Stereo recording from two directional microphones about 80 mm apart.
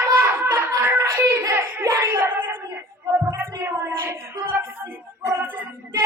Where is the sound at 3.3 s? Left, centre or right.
Right.